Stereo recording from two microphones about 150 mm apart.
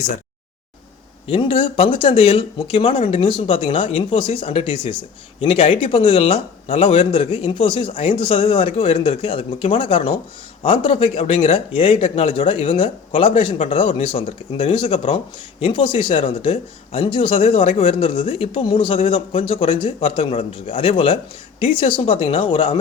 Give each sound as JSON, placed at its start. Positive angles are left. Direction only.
{"t": 1.3, "sound": "speech", "side_deg": 35}